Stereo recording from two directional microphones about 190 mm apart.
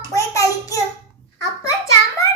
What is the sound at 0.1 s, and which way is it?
Child singing, 15° left (ahead or behind).